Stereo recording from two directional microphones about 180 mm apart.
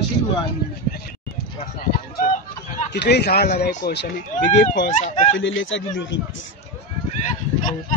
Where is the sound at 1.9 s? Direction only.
50° left (ahead or behind).